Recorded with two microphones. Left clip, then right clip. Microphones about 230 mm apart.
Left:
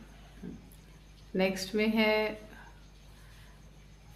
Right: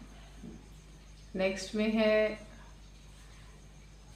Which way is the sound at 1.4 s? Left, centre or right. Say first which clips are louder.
Left 2 dB; left.